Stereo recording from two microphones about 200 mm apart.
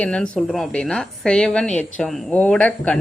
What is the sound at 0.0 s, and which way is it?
A woman's voice, 5° left (ahead or behind).